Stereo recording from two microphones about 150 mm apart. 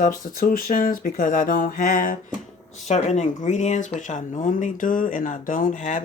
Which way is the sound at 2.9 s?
50° left (ahead or behind).